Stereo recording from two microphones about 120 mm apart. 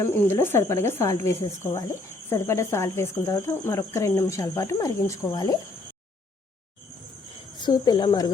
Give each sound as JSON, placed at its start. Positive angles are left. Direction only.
{"t": 0.0, "sound": "speech", "side_deg": 20}
{"t": 7.6, "sound": "speech", "side_deg": 35}